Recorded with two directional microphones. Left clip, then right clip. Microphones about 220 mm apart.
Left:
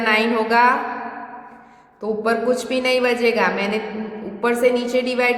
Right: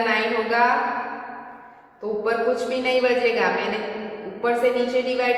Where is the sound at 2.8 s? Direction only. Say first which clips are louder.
Left 2 dB; 50° left (ahead or behind).